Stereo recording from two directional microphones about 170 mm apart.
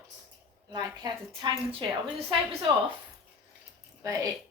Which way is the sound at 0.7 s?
25° right (ahead or behind).